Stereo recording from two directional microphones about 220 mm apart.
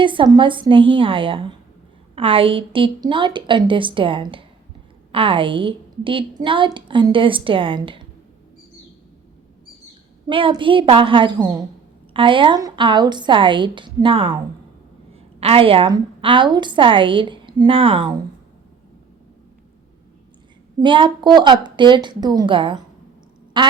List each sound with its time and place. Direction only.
0.0 s a woman's voice: 20° right (ahead or behind)
10.2 s a woman's voice: 20° right (ahead or behind)
20.7 s a woman's voice: 20° right (ahead or behind)
23.6 s quack: 20° right (ahead or behind)